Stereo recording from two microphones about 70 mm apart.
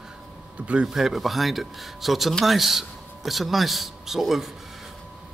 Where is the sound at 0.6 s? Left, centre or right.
Centre.